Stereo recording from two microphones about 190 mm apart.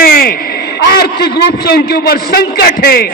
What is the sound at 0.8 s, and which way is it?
A man's voice, 60° left (ahead or behind).